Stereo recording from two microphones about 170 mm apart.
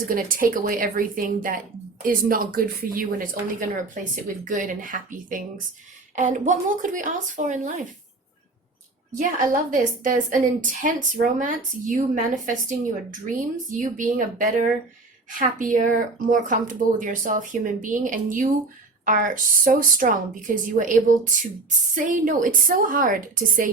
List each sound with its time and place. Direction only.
0.1 s speech: 55° right (ahead or behind)
9.1 s speech: 50° right (ahead or behind)